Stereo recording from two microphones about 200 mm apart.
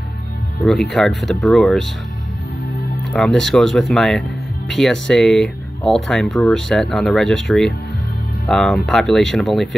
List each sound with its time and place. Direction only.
0.6 s speech: 5° left (ahead or behind)
3.1 s speech: centre (ahead or behind)